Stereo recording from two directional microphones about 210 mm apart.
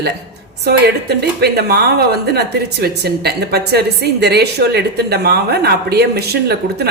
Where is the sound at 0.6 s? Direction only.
50° right (ahead or behind).